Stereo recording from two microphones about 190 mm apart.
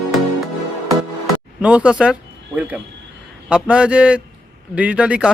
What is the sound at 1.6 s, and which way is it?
A man's voice, 5° right (ahead or behind).